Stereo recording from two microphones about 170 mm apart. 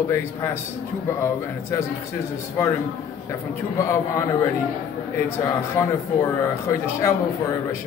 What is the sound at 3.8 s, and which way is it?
Speech, 15° left (ahead or behind).